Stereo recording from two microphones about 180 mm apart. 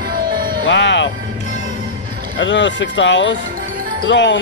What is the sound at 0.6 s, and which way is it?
Music, 80° left.